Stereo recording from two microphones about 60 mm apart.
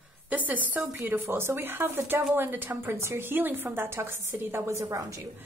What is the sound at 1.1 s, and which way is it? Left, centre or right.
A woman's voice, right.